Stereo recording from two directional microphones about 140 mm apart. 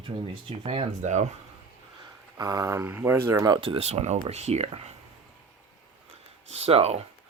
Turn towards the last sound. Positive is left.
turn(degrees=-50)  # may be behind; listen again after turning